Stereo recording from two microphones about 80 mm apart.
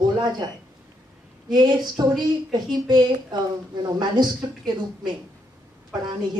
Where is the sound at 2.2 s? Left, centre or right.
Right.